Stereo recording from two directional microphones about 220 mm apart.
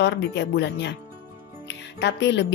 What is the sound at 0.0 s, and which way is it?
Speech, 50° left (ahead or behind).